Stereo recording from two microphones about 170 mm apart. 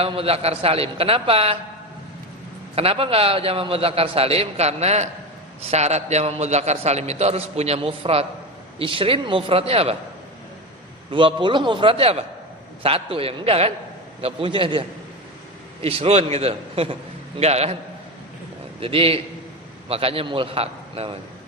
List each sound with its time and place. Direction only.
0.0 s a man's voice: 35° right (ahead or behind)
2.7 s a man's voice: 35° right (ahead or behind)
11.1 s a man's voice: 30° right (ahead or behind)
18.8 s a man's voice: 30° right (ahead or behind)